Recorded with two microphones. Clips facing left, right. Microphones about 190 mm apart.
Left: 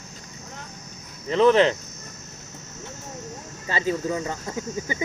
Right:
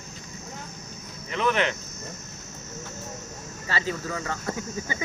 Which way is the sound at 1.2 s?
30° left (ahead or behind).